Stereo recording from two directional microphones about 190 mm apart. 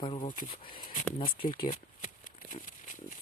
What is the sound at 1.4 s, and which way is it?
Speech, 45° left (ahead or behind).